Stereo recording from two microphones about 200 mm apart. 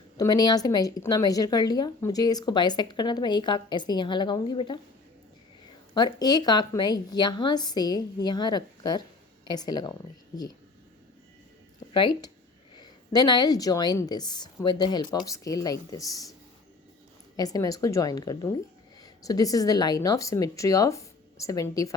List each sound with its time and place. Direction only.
0.2 s a woman's voice: 20° left (ahead or behind)
5.9 s a woman's voice: 20° left (ahead or behind)
11.9 s a woman's voice: 25° left (ahead or behind)
17.3 s speech: 20° left (ahead or behind)